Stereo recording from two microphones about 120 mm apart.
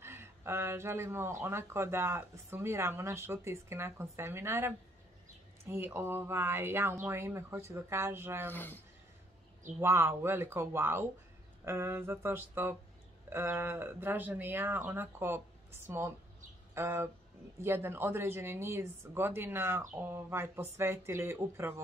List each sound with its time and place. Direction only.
0.0 s speech: 20° right (ahead or behind)
8.5 s speech: 15° left (ahead or behind)
9.8 s speech: 20° right (ahead or behind)
16.7 s speech: 20° right (ahead or behind)